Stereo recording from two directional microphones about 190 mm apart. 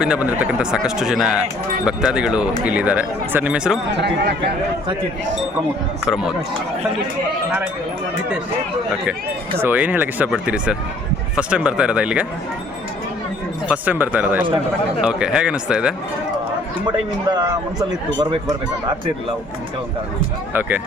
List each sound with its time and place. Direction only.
0.0 s speech: 5° right (ahead or behind)
3.9 s speech: 60° right (ahead or behind)
9.6 s speech: 10° right (ahead or behind)
13.7 s speech: 10° right (ahead or behind)
16.8 s a man's voice: 20° right (ahead or behind)
20.5 s speech: 10° right (ahead or behind)